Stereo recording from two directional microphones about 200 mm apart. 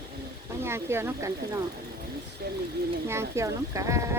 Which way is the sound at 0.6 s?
10° right (ahead or behind).